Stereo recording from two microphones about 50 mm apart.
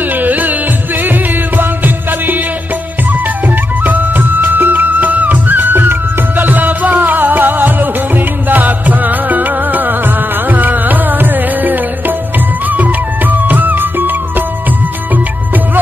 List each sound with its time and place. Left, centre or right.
0.2 s music: right
3.8 s music: right